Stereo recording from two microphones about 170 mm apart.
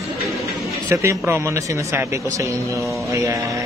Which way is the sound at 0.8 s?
15° right (ahead or behind).